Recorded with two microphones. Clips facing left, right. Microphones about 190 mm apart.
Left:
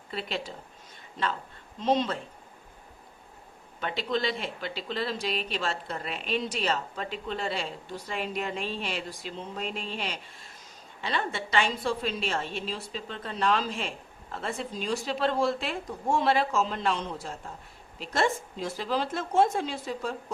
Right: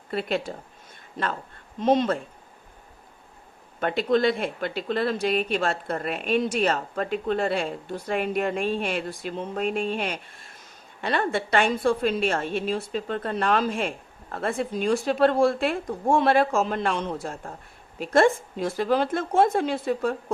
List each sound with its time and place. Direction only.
0.1 s a woman's voice: 55° right (ahead or behind)
1.8 s a woman's voice: 55° right (ahead or behind)
3.8 s a woman's voice: 50° right (ahead or behind)